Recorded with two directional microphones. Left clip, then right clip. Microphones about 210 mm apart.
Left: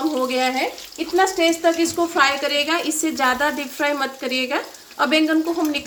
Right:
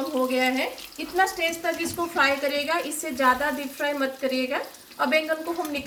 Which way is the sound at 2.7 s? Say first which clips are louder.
Left 5 dB; 55° left (ahead or behind).